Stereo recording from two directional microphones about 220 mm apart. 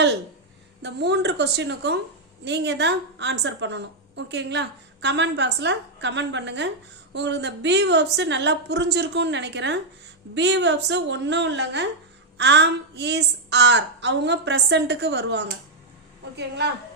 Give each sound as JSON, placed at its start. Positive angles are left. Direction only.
{"t": 0.8, "sound": "a woman's voice", "side_deg": -50}